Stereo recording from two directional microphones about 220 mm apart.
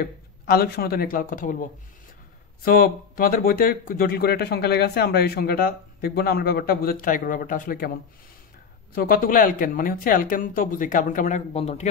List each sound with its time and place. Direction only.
0.0 s speech: 45° left (ahead or behind)
2.6 s speech: 40° left (ahead or behind)
8.9 s speech: 40° left (ahead or behind)